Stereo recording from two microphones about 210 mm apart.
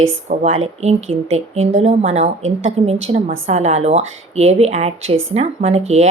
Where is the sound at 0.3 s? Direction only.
30° right (ahead or behind).